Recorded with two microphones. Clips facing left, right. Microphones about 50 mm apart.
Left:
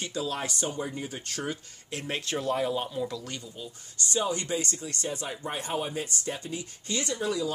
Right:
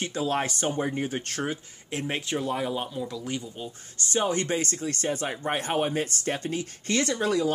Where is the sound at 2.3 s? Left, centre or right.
Centre.